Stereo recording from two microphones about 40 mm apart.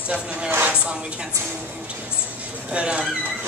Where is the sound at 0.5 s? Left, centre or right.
Right.